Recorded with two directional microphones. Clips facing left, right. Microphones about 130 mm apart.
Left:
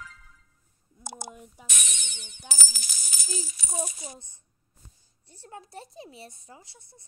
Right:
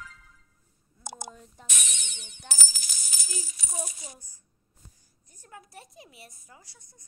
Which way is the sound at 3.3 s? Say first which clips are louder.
Left 4 dB; 25° left (ahead or behind).